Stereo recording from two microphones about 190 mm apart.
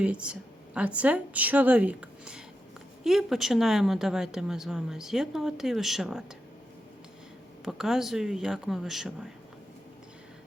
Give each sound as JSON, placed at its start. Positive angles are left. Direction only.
{"t": 0.0, "sound": "speech", "side_deg": -5}
{"t": 7.6, "sound": "speech", "side_deg": 0}